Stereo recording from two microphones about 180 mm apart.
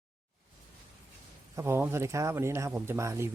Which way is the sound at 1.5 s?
15° right (ahead or behind).